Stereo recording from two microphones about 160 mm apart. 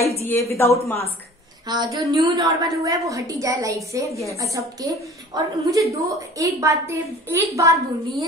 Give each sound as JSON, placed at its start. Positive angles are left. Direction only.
{"t": 0.2, "sound": "a woman's voice", "side_deg": 15}
{"t": 1.7, "sound": "a woman's voice", "side_deg": -25}